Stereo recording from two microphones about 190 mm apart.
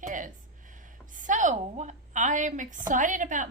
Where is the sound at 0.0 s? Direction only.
45° right (ahead or behind).